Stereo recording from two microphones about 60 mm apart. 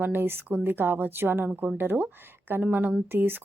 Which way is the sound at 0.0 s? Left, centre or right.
Right.